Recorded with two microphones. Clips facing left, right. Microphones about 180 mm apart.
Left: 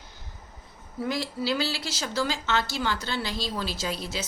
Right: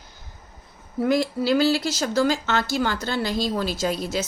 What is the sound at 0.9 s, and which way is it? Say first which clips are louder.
Speech: right 8 dB; 50° right (ahead or behind).